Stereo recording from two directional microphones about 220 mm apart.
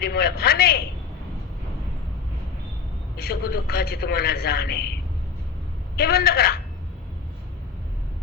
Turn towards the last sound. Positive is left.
turn(degrees=45)  # may be behind; listen again after turning